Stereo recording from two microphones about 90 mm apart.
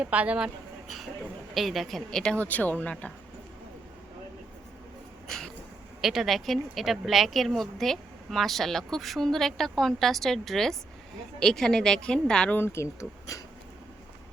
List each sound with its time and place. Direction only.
0.0 s a woman's voice: 15° right (ahead or behind); by 3.1 s 15° left (ahead or behind)
6.0 s a woman's voice: 5° right (ahead or behind)
12.5 s speech: 30° left (ahead or behind)